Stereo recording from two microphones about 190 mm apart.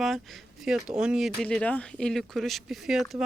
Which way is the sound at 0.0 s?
Centre (ahead or behind).